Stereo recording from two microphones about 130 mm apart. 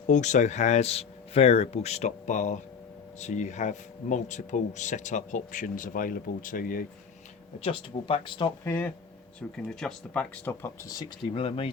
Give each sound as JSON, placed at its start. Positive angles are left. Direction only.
{"t": 0.1, "sound": "speech", "side_deg": 70}
{"t": 7.6, "sound": "speech", "side_deg": 45}
{"t": 8.6, "sound": "speech", "side_deg": 15}
{"t": 9.6, "sound": "speech", "side_deg": 5}
{"t": 10.4, "sound": "speech", "side_deg": 20}